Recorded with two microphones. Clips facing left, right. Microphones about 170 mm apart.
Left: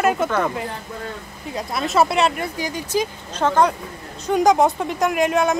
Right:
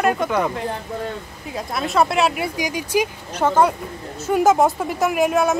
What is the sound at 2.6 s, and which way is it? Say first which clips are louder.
A woman's voice: right 2 dB; 10° right (ahead or behind).